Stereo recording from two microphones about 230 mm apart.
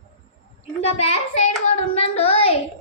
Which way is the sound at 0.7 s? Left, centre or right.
Left.